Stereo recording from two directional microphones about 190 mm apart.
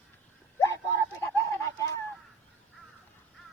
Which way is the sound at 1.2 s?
15° left (ahead or behind).